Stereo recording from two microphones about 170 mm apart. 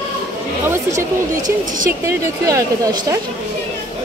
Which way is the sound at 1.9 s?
15° right (ahead or behind).